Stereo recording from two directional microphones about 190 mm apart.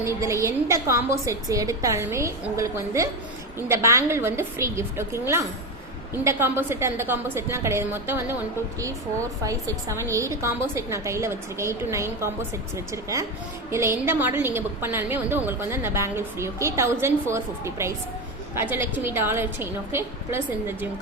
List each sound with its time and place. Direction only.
0.0 s a woman's voice: 15° right (ahead or behind)
9.4 s a woman's voice: 15° right (ahead or behind)